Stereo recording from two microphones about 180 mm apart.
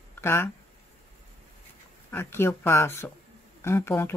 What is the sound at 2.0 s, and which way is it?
Speech, 10° left (ahead or behind).